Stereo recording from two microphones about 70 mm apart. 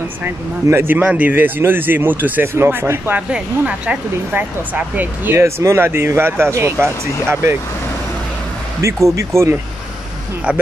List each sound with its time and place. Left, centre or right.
0.7 s speech: right
1.0 s speech: right
3.2 s speech: centre
5.4 s speech: right
8.8 s speech: right